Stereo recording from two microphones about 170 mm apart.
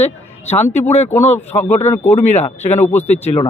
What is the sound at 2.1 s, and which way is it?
Speech, 40° left (ahead or behind).